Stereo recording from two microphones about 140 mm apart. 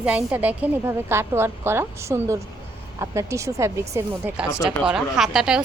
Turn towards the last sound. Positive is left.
turn(degrees=-5)  # may be behind; listen again after turning